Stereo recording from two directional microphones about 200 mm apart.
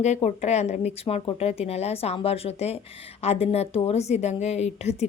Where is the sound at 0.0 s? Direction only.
35° left (ahead or behind).